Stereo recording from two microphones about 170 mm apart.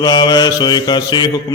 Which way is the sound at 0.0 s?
20° left (ahead or behind).